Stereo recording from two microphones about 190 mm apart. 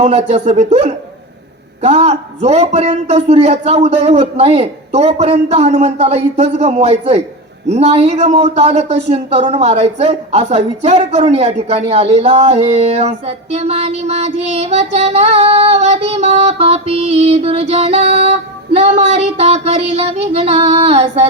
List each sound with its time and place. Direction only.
0.0 s speech: 35° right (ahead or behind)